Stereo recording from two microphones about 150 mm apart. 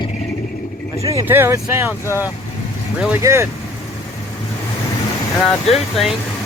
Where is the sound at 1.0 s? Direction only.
15° right (ahead or behind).